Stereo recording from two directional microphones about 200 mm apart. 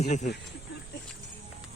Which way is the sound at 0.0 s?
35° left (ahead or behind).